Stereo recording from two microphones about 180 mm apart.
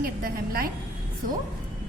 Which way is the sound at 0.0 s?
55° right (ahead or behind).